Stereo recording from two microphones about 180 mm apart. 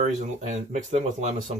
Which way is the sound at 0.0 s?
40° right (ahead or behind).